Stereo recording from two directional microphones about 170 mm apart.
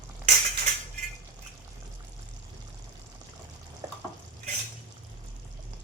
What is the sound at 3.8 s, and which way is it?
Stir, 15° right (ahead or behind).